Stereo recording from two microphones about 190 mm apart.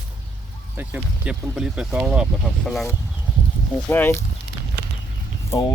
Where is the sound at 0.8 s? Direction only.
5° right (ahead or behind).